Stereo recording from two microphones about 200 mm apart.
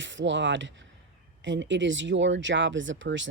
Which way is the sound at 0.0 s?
65° right (ahead or behind).